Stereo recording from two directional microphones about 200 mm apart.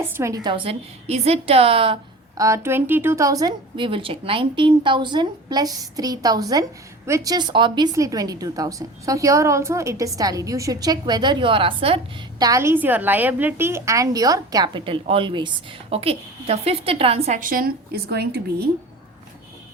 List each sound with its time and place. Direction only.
0.1 s a woman's voice: 15° right (ahead or behind)
2.4 s a woman's voice: 15° right (ahead or behind)
12.4 s a woman's voice: 15° right (ahead or behind); by 18.7 s 55° right (ahead or behind)